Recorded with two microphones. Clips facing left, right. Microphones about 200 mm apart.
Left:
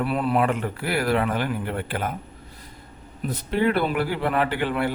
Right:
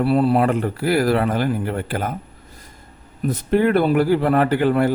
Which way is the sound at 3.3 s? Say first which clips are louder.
Right 5 dB; 50° right (ahead or behind).